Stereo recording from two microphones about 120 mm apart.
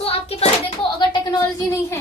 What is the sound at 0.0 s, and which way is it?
Hands, 55° left (ahead or behind).